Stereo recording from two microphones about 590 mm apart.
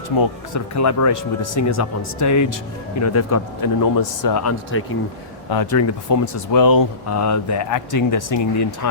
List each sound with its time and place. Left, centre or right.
0.2 s speech: left